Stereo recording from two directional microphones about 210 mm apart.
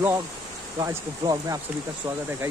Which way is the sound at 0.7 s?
15° right (ahead or behind).